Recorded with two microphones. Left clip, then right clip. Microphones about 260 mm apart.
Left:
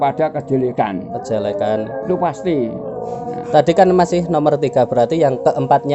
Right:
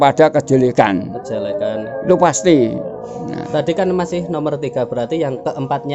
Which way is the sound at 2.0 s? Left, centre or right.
Right.